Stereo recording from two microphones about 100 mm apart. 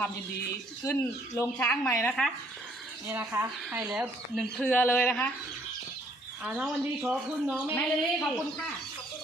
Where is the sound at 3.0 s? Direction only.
25° right (ahead or behind).